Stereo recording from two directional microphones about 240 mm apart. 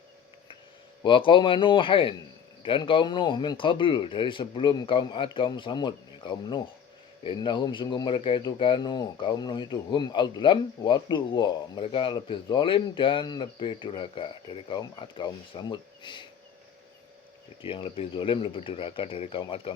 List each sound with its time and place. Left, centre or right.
1.0 s speech: centre
17.6 s speech: left